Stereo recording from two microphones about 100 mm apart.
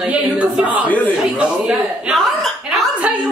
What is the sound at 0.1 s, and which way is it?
A man's voice, 15° right (ahead or behind).